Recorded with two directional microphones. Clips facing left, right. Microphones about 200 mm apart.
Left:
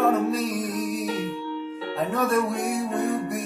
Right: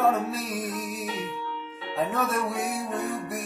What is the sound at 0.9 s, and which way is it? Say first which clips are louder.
Music: left 5 dB; 35° left (ahead or behind).